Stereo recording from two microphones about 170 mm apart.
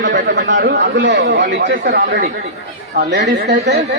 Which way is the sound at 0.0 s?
90° right.